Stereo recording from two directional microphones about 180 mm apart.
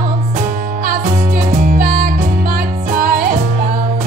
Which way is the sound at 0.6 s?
55° right (ahead or behind).